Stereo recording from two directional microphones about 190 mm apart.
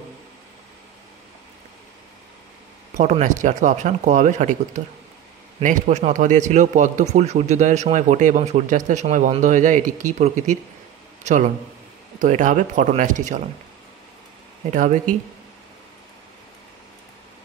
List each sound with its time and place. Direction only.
3.0 s a man's voice: 40° right (ahead or behind)